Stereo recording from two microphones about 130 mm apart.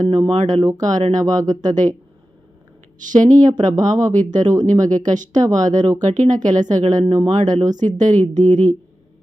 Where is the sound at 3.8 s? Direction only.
70° right (ahead or behind).